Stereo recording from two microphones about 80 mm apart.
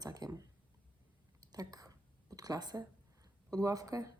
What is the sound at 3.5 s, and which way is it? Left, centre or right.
Speech, right.